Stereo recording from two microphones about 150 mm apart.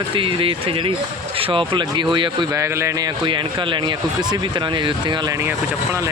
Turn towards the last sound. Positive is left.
turn(degrees=-30)  # may be behind; listen again after turning